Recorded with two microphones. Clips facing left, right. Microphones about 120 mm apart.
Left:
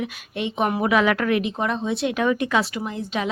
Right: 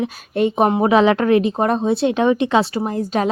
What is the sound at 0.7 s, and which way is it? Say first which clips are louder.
Speech: right 6 dB; 30° right (ahead or behind).